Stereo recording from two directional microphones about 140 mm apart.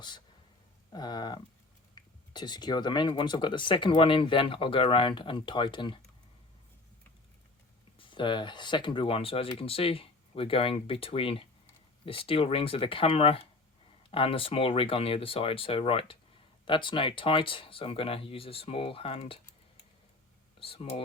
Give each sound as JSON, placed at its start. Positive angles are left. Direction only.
{"t": 0.9, "sound": "speech", "side_deg": 30}
{"t": 7.9, "sound": "speech", "side_deg": 35}
{"t": 20.6, "sound": "speech", "side_deg": 45}